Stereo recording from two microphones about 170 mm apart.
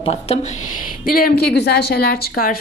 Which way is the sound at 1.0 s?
60° left (ahead or behind).